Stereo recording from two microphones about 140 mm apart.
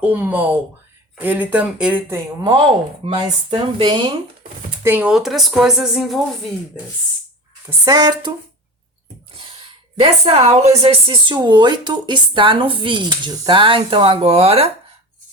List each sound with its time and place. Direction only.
0.0 s speech: 10° right (ahead or behind)
3.0 s a woman's voice: 30° right (ahead or behind)
4.8 s speech: 15° right (ahead or behind)
5.1 s speech: centre (ahead or behind)
7.9 s speech: 25° right (ahead or behind)
10.0 s a woman's voice: 50° right (ahead or behind)